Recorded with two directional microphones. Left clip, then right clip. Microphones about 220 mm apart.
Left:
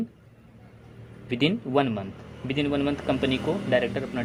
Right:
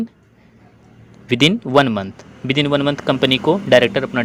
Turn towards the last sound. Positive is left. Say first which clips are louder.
# right 12 dB
turn(degrees=-30)  # may be behind; listen again after turning